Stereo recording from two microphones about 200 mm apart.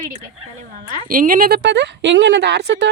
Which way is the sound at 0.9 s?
45° right (ahead or behind).